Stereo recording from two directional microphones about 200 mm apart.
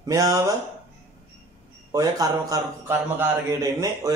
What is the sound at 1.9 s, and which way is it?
A man's voice, 15° right (ahead or behind).